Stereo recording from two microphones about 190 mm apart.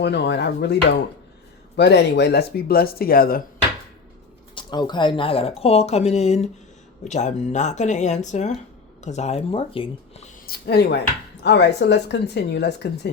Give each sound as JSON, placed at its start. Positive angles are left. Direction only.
{"t": 0.0, "sound": "speech", "side_deg": 60}
{"t": 4.5, "sound": "speech", "side_deg": 20}
{"t": 10.4, "sound": "speech", "side_deg": 55}